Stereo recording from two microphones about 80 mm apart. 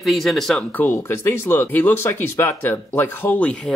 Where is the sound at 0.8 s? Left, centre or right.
Left.